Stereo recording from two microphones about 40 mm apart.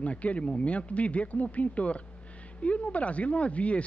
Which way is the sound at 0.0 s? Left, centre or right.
Left.